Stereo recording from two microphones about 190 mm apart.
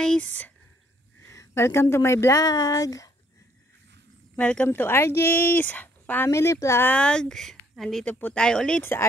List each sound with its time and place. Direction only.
0.0 s speech: 5° left (ahead or behind)
4.4 s speech: 5° left (ahead or behind)